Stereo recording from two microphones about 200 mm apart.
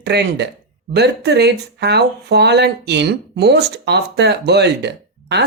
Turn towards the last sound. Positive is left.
turn(degrees=-60)  # may be behind; listen again after turning